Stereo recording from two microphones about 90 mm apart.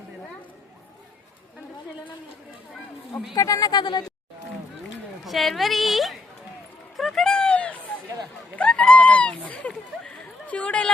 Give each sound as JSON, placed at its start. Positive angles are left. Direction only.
{"t": 3.3, "sound": "speech", "side_deg": 40}
{"t": 5.2, "sound": "a woman's voice", "side_deg": 0}
{"t": 6.9, "sound": "a sound", "side_deg": 0}